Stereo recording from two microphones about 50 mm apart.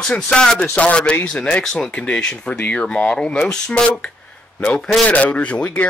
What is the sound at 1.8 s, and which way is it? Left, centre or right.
Speech, left.